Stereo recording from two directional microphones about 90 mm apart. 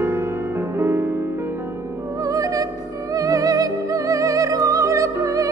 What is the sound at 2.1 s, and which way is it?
Music, 40° right (ahead or behind).